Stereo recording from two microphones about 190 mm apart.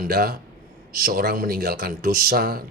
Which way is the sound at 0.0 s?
50° right (ahead or behind).